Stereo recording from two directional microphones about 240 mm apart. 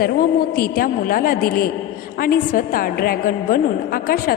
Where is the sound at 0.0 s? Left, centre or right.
Left.